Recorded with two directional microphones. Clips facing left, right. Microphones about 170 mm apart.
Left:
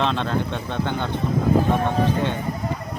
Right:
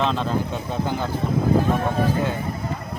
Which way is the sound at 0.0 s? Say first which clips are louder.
Even; 5° right (ahead or behind).